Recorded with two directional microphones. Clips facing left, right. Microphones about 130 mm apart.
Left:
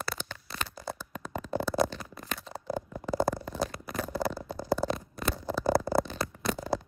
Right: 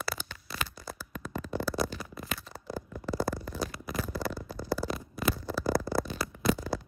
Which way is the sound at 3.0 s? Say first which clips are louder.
Left 3 dB; centre (ahead or behind).